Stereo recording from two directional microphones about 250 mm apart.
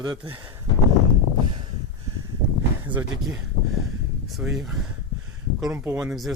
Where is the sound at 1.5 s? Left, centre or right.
Centre.